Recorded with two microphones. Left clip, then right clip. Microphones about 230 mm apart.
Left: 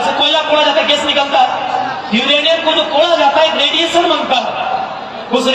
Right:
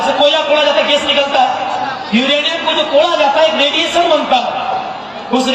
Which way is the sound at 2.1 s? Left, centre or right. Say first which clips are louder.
Left 2 dB; left.